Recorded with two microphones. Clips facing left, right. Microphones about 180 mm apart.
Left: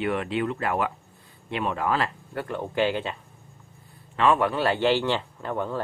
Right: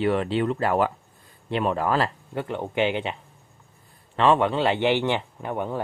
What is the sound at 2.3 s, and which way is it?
Speech, 20° right (ahead or behind).